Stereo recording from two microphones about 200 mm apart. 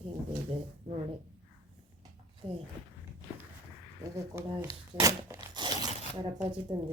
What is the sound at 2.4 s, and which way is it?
Zipper, 30° right (ahead or behind).